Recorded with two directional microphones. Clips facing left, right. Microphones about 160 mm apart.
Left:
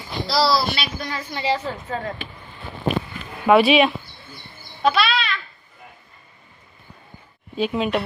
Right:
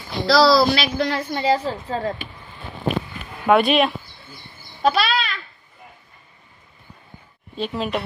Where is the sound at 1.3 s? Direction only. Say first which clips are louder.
Right 4 dB; 40° right (ahead or behind).